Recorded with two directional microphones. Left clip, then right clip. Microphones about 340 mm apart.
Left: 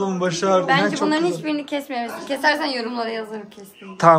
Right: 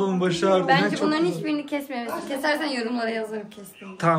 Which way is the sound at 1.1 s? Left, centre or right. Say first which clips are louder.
Left 3 dB; left.